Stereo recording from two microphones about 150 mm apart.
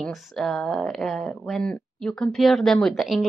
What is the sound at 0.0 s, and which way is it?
Speech, centre (ahead or behind).